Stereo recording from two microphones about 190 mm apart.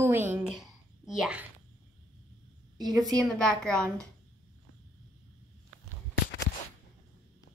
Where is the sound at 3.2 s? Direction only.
5° left (ahead or behind).